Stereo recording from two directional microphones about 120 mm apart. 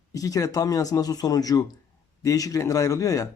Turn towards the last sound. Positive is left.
turn(degrees=25)  # may be behind; listen again after turning